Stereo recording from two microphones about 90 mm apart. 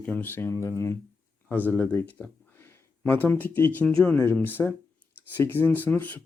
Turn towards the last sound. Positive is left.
turn(degrees=20)  # may be behind; listen again after turning